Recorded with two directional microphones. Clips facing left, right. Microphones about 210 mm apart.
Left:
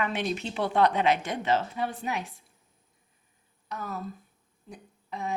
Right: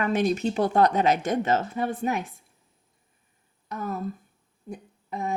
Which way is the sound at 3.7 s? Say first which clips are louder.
Right 5 dB; 50° right (ahead or behind).